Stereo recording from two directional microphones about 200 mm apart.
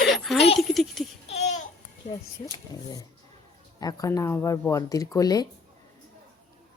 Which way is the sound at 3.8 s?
15° left (ahead or behind).